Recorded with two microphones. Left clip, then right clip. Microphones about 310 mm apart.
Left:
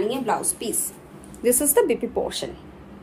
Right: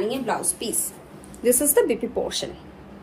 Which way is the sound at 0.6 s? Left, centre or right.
Centre.